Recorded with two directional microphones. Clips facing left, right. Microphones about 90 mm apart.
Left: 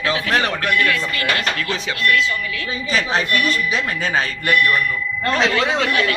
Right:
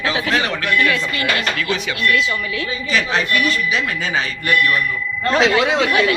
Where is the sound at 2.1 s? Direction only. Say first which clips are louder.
Even; 20° right (ahead or behind).